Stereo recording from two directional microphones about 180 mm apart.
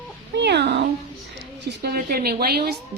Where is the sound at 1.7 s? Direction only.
60° right (ahead or behind).